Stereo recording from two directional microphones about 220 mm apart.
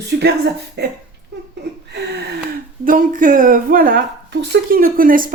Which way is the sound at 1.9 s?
50° right (ahead or behind).